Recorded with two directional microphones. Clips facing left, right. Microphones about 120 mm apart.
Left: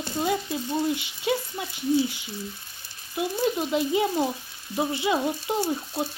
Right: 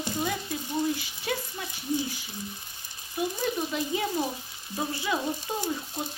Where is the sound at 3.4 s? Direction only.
15° left (ahead or behind).